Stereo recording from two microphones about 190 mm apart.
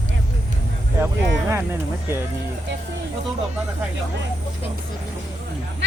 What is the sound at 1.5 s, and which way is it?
Speech, 15° right (ahead or behind).